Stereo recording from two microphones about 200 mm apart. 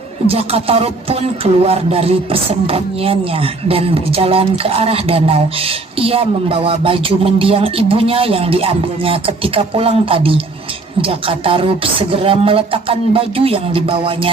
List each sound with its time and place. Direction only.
0.3 s speech: 30° right (ahead or behind)